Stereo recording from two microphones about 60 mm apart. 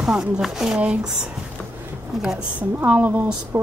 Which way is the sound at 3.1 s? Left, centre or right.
Right.